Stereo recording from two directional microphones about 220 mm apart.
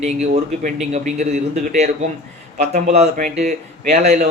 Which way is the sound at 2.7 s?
30° right (ahead or behind).